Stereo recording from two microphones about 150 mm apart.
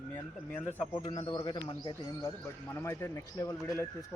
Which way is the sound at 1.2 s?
35° left (ahead or behind).